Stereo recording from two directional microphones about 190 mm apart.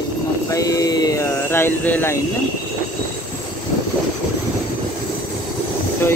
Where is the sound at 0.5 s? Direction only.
20° left (ahead or behind).